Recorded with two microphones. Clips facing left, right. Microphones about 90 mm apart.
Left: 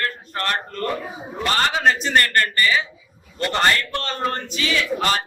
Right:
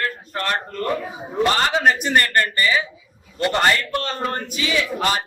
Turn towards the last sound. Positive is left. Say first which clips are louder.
# even
turn(degrees=-15)  # may be behind; listen again after turning